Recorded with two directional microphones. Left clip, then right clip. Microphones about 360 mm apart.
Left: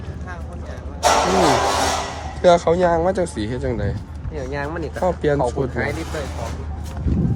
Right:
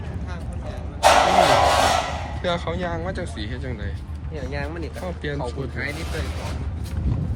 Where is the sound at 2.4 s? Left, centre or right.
Centre.